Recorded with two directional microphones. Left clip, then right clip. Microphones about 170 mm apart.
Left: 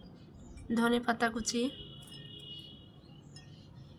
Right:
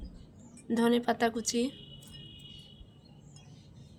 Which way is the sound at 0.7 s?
45° right (ahead or behind).